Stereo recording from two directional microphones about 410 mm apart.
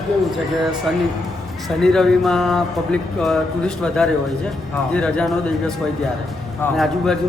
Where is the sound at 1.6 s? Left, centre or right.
Centre.